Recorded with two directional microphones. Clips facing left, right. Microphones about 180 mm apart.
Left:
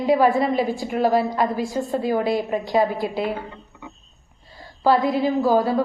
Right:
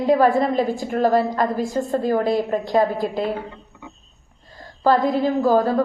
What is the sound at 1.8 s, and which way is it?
A woman's voice, centre (ahead or behind).